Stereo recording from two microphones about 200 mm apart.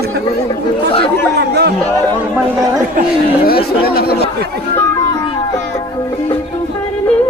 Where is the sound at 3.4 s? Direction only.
50° left (ahead or behind).